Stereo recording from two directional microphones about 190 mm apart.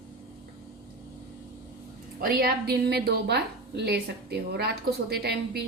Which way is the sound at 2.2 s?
50° right (ahead or behind).